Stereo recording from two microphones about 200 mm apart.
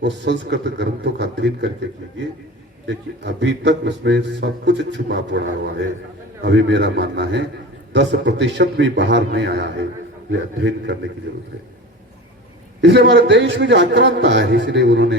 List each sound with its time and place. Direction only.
0.0 s a man's voice: 60° right (ahead or behind)
12.8 s a man's voice: 60° right (ahead or behind)